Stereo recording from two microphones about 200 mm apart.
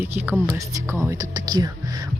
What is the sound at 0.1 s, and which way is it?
A woman's voice, 10° right (ahead or behind).